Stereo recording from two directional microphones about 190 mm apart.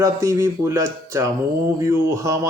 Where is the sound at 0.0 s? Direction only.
15° right (ahead or behind).